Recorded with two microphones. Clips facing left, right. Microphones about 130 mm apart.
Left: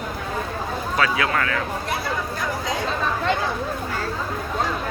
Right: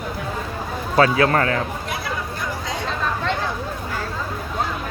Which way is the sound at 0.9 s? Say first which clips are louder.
Right 6 dB; 35° right (ahead or behind).